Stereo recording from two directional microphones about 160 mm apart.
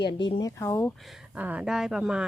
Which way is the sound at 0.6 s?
15° left (ahead or behind).